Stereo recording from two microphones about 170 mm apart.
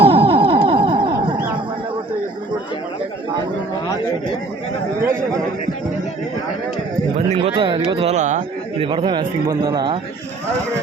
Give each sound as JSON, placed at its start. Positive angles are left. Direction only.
{"t": 0.0, "sound": "a sound", "side_deg": -35}
{"t": 7.3, "sound": "a man's voice", "side_deg": -35}
{"t": 8.9, "sound": "a man's voice", "side_deg": -30}